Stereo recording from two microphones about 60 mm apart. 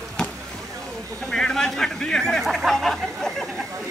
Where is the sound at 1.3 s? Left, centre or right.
Centre.